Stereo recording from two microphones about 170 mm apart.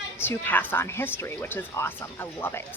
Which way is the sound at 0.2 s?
10° left (ahead or behind).